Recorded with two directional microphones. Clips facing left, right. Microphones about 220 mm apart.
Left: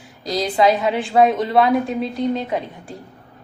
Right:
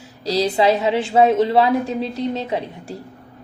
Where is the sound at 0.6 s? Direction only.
25° right (ahead or behind).